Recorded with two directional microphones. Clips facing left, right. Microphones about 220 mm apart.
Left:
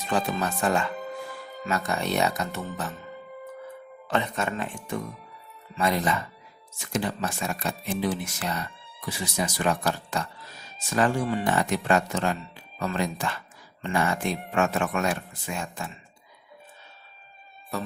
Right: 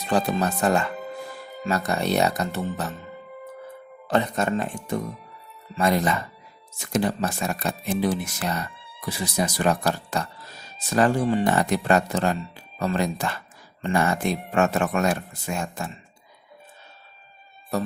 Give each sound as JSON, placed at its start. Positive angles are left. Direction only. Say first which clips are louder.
{"t": 0.1, "sound": "speech", "louder": "right 4 dB", "side_deg": -35}
{"t": 4.1, "sound": "speech", "louder": "right 5 dB", "side_deg": -40}